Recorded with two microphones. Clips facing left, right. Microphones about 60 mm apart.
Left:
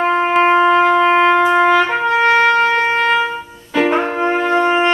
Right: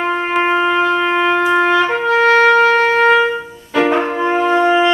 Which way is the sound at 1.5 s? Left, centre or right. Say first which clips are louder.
Left 1 dB; centre.